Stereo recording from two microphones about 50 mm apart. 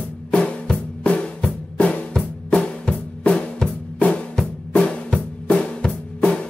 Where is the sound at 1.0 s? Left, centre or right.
Left.